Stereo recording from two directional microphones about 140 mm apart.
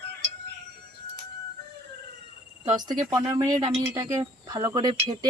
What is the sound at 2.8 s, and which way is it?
Speech, 30° right (ahead or behind).